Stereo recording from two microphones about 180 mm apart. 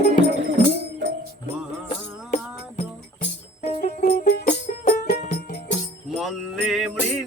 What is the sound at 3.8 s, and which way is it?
Music, 50° left (ahead or behind).